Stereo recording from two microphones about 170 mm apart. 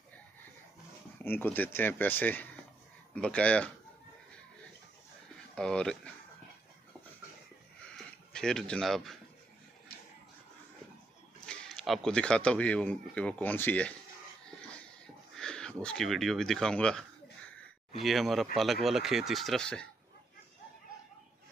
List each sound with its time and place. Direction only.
1.2 s speech: 10° left (ahead or behind)
5.6 s speech: 5° left (ahead or behind)
8.3 s speech: 5° left (ahead or behind)
11.4 s speech: centre (ahead or behind)
15.3 s speech: 5° left (ahead or behind)